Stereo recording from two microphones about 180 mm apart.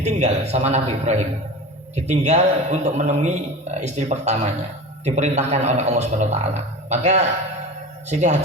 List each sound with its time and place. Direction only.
0.0 s a man's voice: 40° right (ahead or behind)